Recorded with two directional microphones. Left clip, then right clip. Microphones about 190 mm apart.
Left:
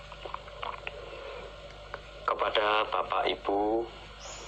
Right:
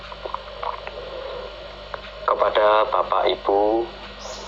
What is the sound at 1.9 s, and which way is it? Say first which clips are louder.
Speech: right 9 dB; 35° left (ahead or behind).